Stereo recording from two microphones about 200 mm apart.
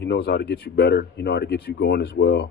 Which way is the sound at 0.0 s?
60° left (ahead or behind).